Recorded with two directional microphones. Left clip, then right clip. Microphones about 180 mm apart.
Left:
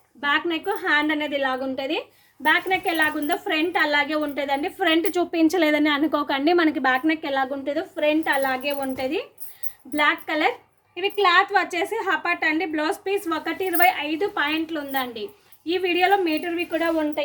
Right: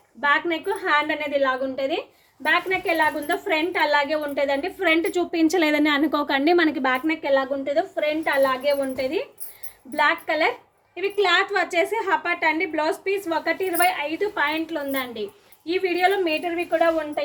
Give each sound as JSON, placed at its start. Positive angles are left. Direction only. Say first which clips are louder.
{"t": 0.2, "sound": "a woman's voice", "louder": "right 2 dB", "side_deg": 30}
{"t": 7.2, "sound": "a woman's voice", "louder": "right 3 dB", "side_deg": 35}